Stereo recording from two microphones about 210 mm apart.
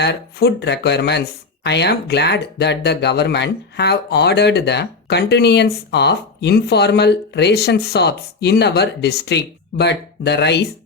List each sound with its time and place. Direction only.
0.0 s speech: 50° left (ahead or behind)